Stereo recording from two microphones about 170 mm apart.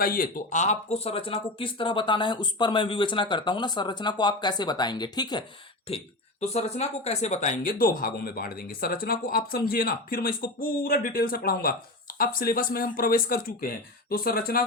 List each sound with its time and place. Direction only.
0.0 s speech: 60° left (ahead or behind); by 5.5 s 25° left (ahead or behind)
5.9 s speech: 35° left (ahead or behind); by 14.6 s 60° left (ahead or behind)